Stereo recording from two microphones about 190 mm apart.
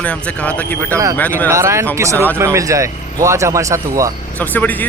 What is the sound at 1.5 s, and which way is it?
Speech, 15° right (ahead or behind).